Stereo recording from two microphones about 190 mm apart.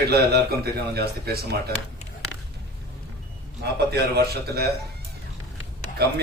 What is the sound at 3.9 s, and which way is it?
Speech, 55° right (ahead or behind).